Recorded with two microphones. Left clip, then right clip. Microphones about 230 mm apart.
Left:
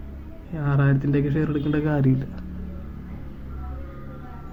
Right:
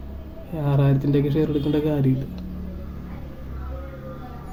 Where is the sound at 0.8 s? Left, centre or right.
Centre.